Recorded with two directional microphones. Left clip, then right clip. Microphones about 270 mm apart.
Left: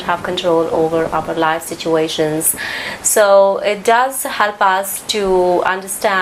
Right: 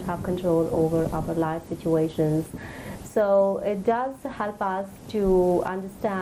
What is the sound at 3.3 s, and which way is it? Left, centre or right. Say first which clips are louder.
Speech: left 10 dB; left.